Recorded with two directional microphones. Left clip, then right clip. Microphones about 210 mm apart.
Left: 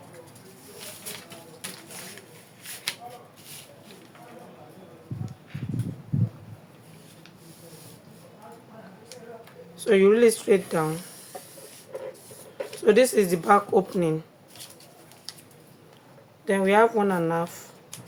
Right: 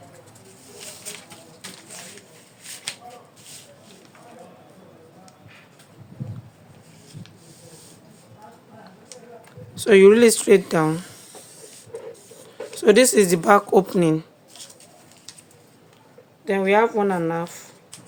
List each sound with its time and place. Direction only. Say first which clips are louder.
2.9 s a sound: left 1 dB; 10° left (ahead or behind)
9.7 s a woman's voice: right 6 dB; 55° right (ahead or behind)
12.8 s a woman's voice: right 4 dB; 50° right (ahead or behind)
16.5 s speech: right 1 dB; 25° right (ahead or behind)